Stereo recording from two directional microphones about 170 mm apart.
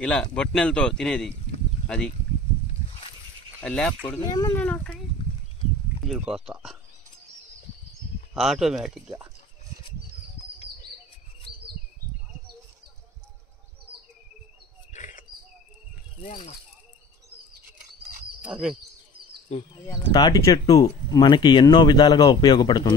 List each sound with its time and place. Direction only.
0.0 s speech: 5° left (ahead or behind)
3.6 s speech: 5° left (ahead or behind)
4.3 s speech: 25° left (ahead or behind)
4.6 s speech: 10° left (ahead or behind)
6.0 s speech: 5° right (ahead or behind)
8.4 s speech: centre (ahead or behind)
11.5 s a sound: 30° right (ahead or behind)
14.9 s bird: 45° left (ahead or behind)
18.4 s speech: 5° right (ahead or behind)
19.5 s speech: 40° left (ahead or behind)
20.0 s speech: 25° left (ahead or behind)